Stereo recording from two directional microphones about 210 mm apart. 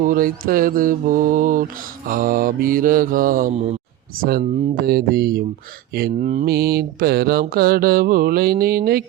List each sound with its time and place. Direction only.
0.0 s mantra: 40° right (ahead or behind)
4.2 s mantra: 45° right (ahead or behind)